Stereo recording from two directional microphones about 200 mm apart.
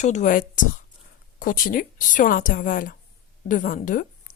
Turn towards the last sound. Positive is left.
turn(degrees=40)  # may be behind; listen again after turning